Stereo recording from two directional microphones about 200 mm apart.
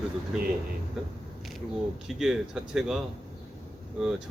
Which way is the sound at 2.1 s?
Centre (ahead or behind).